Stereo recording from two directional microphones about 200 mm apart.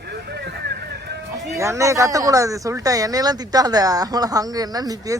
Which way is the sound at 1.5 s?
15° right (ahead or behind).